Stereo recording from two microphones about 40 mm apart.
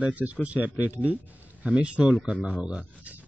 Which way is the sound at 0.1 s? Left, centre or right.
Right.